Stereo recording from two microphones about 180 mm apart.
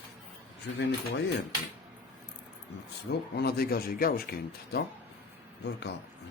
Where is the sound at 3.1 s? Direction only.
60° left (ahead or behind).